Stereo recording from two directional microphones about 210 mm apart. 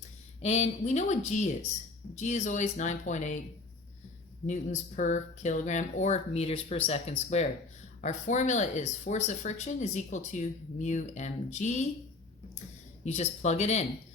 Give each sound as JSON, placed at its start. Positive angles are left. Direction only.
{"t": 0.4, "sound": "speech", "side_deg": 30}
{"t": 4.4, "sound": "speech", "side_deg": 35}
{"t": 13.1, "sound": "speech", "side_deg": 30}